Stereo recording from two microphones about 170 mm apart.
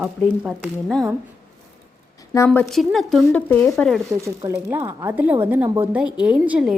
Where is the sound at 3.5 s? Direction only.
10° left (ahead or behind).